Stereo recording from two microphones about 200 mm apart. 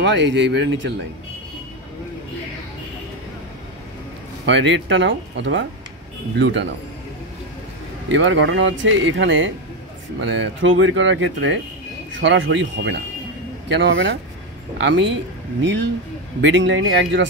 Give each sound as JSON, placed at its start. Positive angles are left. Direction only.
{"t": 0.0, "sound": "speech", "side_deg": -65}
{"t": 4.5, "sound": "speech", "side_deg": -65}
{"t": 8.1, "sound": "speech", "side_deg": -65}
{"t": 16.3, "sound": "speech", "side_deg": -65}